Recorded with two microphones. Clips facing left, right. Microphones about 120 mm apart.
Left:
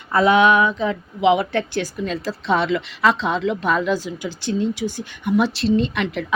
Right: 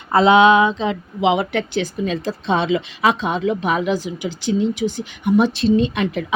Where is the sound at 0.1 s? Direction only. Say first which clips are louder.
Right 3 dB; 25° right (ahead or behind).